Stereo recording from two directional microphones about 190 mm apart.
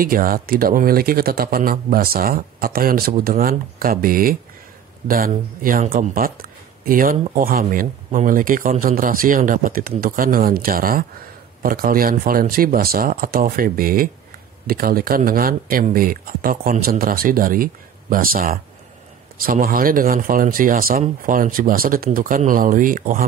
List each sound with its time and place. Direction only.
0.0 s speech: 50° right (ahead or behind)